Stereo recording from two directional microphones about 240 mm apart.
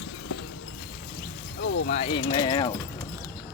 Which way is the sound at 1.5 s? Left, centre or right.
Left.